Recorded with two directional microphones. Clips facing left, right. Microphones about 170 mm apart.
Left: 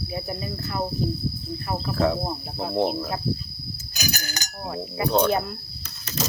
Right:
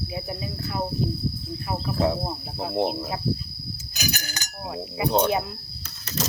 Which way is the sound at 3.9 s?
40° left (ahead or behind).